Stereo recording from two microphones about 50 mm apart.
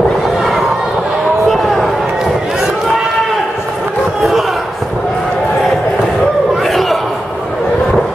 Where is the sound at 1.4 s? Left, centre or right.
Centre.